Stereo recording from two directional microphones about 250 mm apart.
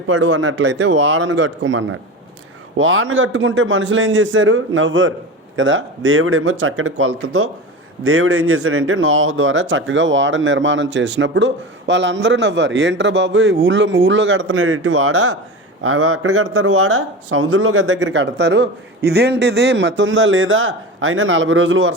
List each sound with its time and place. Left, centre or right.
0.1 s speech: right